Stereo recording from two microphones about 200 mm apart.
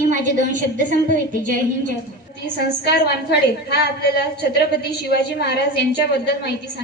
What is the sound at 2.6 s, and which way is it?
Speech, 55° left (ahead or behind).